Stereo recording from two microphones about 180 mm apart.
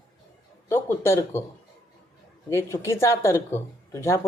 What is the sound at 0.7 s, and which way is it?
Speech, 15° left (ahead or behind).